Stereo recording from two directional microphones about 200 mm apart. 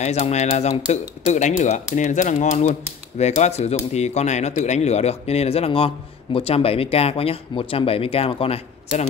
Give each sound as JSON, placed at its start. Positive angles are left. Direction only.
{"t": 0.0, "sound": "speech", "side_deg": 35}